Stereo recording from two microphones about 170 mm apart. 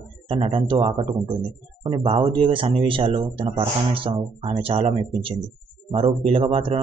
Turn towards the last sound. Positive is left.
turn(degrees=-35)  # may be behind; listen again after turning